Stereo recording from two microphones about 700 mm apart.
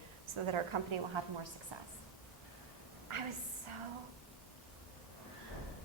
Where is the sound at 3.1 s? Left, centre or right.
Right.